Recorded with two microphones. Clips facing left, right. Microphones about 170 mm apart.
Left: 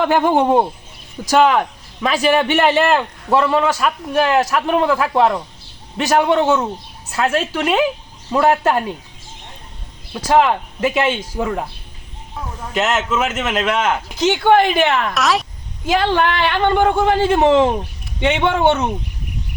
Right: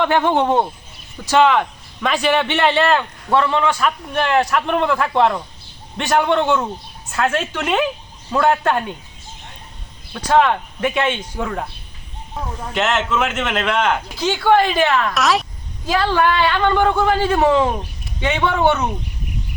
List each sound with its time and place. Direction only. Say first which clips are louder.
0.0 s a man's voice: left 2 dB; 5° left (ahead or behind)
10.1 s a man's voice: left 1 dB; 10° left (ahead or behind)
12.7 s a man's voice: left 1 dB; centre (ahead or behind)
14.2 s a man's voice: left 3 dB; 20° left (ahead or behind)
15.1 s a man's voice: even; centre (ahead or behind)
15.9 s a man's voice: left 1 dB; 20° left (ahead or behind)